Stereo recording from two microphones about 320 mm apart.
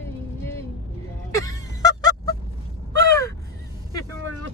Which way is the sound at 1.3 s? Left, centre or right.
Centre.